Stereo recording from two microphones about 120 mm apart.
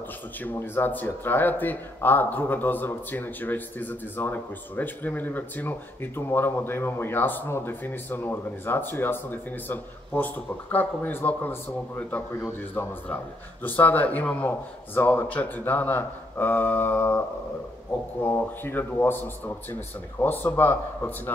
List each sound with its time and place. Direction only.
0.4 s speech: 15° left (ahead or behind)
18.2 s speech: 20° left (ahead or behind)